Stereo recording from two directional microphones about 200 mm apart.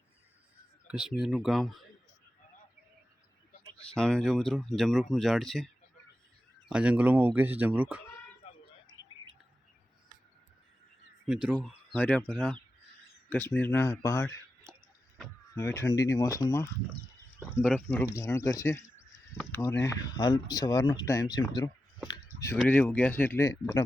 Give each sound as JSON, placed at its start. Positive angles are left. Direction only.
{"t": 0.9, "sound": "speech", "side_deg": -5}
{"t": 3.8, "sound": "speech", "side_deg": 5}
{"t": 6.7, "sound": "speech", "side_deg": -5}
{"t": 11.9, "sound": "speech", "side_deg": 5}
{"t": 15.5, "sound": "speech", "side_deg": 15}
{"t": 21.5, "sound": "clicking", "side_deg": 20}
{"t": 22.5, "sound": "speech", "side_deg": 5}